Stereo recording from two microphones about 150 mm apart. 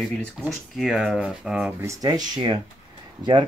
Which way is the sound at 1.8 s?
20° right (ahead or behind).